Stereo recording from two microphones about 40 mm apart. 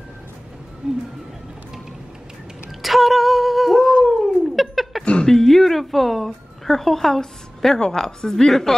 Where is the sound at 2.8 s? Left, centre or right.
Centre.